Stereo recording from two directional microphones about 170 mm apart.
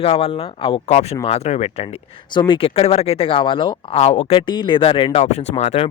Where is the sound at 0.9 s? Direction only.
45° left (ahead or behind).